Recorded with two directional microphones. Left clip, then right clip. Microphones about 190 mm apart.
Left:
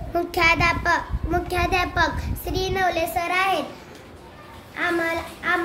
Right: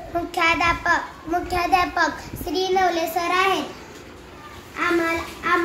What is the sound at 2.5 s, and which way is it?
Child singing, 25° left (ahead or behind).